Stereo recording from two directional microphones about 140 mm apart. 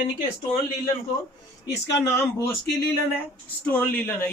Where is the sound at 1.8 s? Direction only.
20° left (ahead or behind).